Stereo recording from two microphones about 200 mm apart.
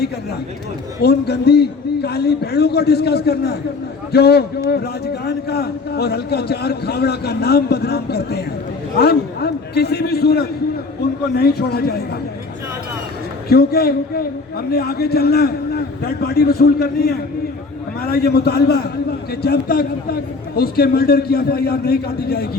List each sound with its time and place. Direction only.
1.0 s a man's voice: 55° left (ahead or behind)
13.5 s a man's voice: 50° left (ahead or behind)